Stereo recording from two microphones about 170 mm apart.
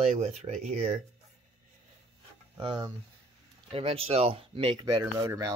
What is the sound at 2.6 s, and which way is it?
Speech, 25° right (ahead or behind).